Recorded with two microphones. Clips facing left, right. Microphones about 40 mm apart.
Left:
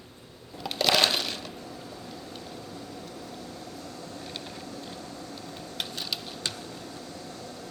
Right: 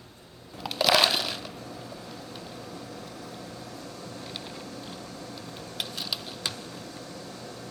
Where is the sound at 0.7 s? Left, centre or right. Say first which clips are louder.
Right 1 dB; centre.